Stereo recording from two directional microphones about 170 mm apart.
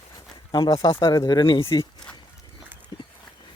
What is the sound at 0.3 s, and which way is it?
Speech, 25° left (ahead or behind).